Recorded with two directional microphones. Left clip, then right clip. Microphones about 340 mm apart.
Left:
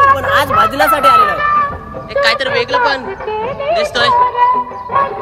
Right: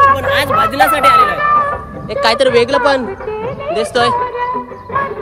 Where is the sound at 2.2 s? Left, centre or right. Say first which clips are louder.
Right 3 dB; centre.